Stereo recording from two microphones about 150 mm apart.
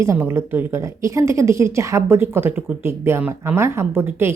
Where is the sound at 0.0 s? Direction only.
20° right (ahead or behind).